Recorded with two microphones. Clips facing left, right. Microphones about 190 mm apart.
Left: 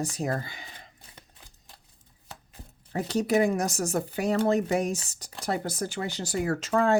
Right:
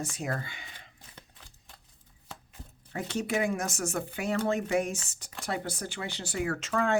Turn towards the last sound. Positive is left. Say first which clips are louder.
# left 5 dB
turn(degrees=35)  # may be behind; listen again after turning